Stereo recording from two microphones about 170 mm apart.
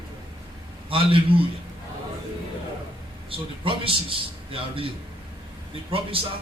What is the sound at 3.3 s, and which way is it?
Speech, 30° right (ahead or behind).